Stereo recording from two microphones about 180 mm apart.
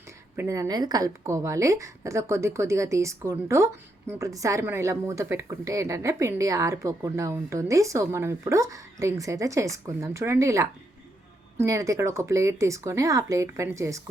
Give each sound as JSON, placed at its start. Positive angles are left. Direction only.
{"t": 0.3, "sound": "a woman's voice", "side_deg": -15}